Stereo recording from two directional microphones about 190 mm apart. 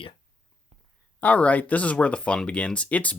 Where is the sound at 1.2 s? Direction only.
10° left (ahead or behind).